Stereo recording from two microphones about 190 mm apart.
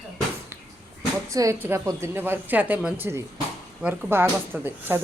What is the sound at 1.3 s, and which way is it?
A woman's voice, 15° right (ahead or behind).